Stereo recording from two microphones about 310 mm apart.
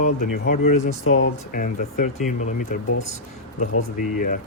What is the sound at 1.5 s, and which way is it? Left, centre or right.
Speech, left.